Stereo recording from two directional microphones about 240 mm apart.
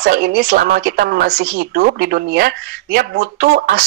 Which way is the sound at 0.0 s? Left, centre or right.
Right.